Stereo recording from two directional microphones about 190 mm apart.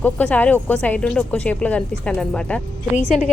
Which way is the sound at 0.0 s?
10° left (ahead or behind).